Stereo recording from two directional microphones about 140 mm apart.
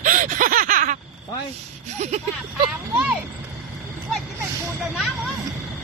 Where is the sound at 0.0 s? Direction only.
65° right (ahead or behind).